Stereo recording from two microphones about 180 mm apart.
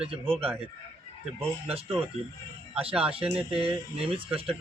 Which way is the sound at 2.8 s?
35° right (ahead or behind).